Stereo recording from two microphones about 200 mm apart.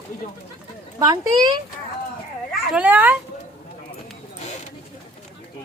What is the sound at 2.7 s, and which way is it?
Speech, 10° right (ahead or behind).